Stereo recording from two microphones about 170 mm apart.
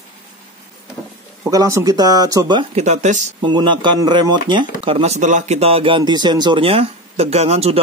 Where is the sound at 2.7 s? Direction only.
45° right (ahead or behind).